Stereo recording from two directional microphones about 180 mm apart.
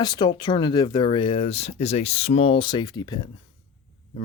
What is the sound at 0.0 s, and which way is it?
Speech, 25° left (ahead or behind).